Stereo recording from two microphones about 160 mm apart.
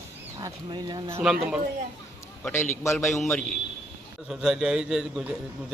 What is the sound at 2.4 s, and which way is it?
Speech, 15° left (ahead or behind).